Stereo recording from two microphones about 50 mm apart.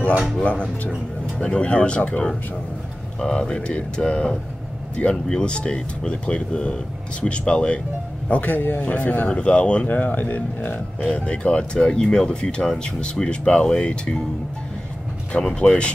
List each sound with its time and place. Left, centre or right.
0.4 s speech: left
8.3 s speech: left
9.3 s speech: left
9.8 s speech: left; by 14.2 s centre
15.3 s speech: centre